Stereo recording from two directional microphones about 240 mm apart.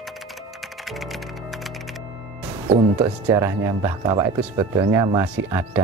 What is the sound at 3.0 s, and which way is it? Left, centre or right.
Speech, centre.